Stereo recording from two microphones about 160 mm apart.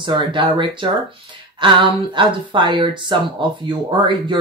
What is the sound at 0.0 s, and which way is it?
Speech, 30° right (ahead or behind).